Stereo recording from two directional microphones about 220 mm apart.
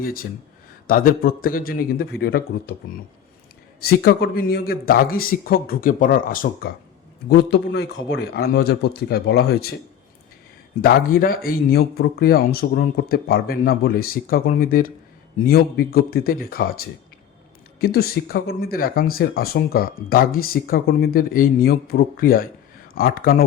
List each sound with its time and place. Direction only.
0.0 s a man's voice: 40° left (ahead or behind)
3.8 s a man's voice: 45° left (ahead or behind)
10.8 s a man's voice: 40° left (ahead or behind)